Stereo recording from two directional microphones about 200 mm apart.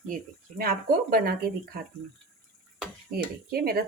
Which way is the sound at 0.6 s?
45° right (ahead or behind).